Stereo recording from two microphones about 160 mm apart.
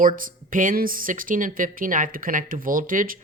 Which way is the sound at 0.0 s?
60° right (ahead or behind).